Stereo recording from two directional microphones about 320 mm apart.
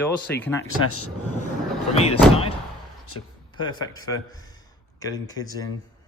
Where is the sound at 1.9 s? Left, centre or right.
Centre.